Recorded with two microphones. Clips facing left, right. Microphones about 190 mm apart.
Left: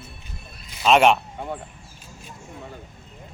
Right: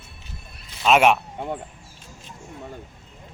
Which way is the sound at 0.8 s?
Centre (ahead or behind).